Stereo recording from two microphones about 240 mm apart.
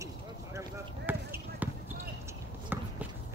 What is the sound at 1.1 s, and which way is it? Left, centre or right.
Basketball bounce, centre.